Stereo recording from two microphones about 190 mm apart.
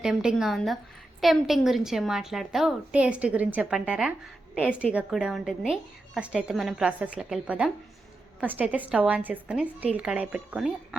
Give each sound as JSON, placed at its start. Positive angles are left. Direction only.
{"t": 0.0, "sound": "a woman's voice", "side_deg": -5}